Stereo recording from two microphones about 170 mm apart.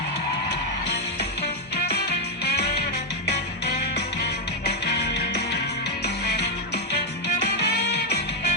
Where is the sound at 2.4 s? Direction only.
70° left (ahead or behind).